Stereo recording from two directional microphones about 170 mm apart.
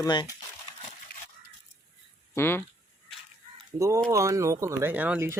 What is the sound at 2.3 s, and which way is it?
Speech, 15° left (ahead or behind).